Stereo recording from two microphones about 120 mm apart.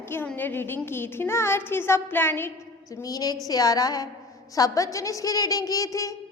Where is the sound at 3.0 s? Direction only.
30° left (ahead or behind).